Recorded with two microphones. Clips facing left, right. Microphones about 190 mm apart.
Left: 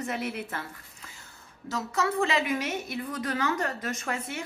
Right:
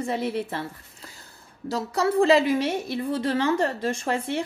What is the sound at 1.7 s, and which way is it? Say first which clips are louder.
A woman's voice: right 5 dB; 35° right (ahead or behind).